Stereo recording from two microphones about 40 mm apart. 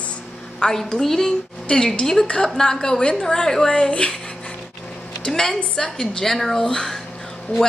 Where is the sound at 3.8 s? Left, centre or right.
Left.